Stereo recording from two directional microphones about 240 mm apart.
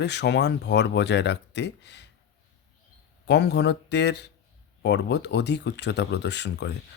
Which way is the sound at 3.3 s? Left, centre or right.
Left.